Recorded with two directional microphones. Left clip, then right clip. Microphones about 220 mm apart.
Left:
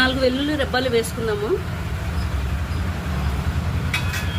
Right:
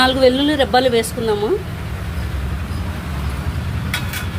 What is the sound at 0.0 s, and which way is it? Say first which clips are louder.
A woman's voice: right 6 dB; 25° right (ahead or behind).